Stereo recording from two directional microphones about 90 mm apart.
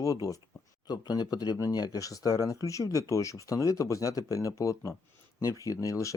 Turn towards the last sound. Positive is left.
turn(degrees=35)  # may be behind; listen again after turning